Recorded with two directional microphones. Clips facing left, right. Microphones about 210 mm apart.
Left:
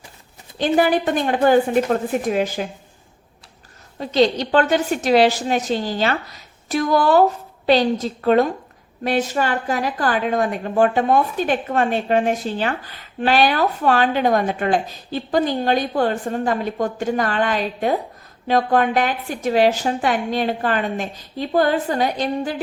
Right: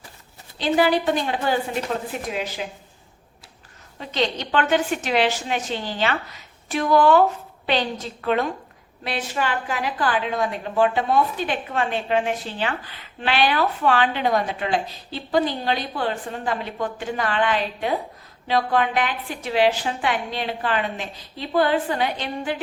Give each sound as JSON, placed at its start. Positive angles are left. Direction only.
{"t": 0.6, "sound": "a woman's voice", "side_deg": 50}
{"t": 4.0, "sound": "a woman's voice", "side_deg": 35}